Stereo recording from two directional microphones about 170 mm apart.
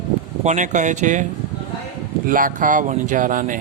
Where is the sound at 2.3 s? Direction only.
55° right (ahead or behind).